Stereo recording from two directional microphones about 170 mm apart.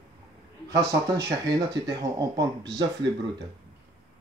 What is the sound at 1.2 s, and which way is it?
Speech, 25° right (ahead or behind).